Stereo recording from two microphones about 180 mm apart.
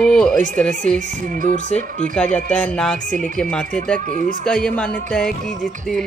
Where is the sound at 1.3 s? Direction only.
45° right (ahead or behind).